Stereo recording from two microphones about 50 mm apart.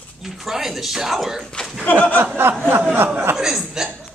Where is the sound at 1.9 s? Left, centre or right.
Left.